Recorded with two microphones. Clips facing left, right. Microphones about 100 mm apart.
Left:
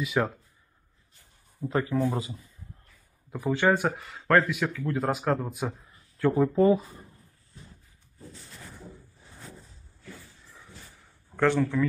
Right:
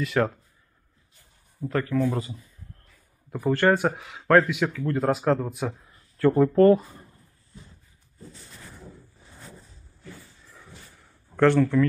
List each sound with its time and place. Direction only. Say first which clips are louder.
0.0 s speech: right 3 dB; 5° left (ahead or behind)
1.7 s speech: right 2 dB; 20° left (ahead or behind)
3.3 s speech: right 3 dB; centre (ahead or behind)
11.5 s speech: right 5 dB; 15° left (ahead or behind)